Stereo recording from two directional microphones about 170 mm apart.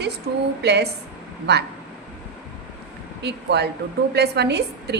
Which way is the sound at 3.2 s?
80° right.